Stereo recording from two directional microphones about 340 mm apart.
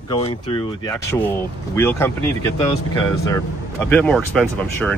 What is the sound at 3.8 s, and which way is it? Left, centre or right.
Speech, centre.